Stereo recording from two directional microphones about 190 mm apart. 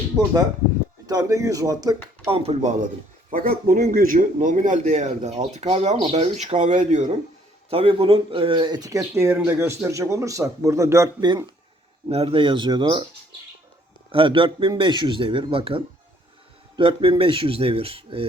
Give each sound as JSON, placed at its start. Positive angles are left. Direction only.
{"t": 1.0, "sound": "a man's voice", "side_deg": -20}
{"t": 12.0, "sound": "speech", "side_deg": -30}
{"t": 14.1, "sound": "speech", "side_deg": -25}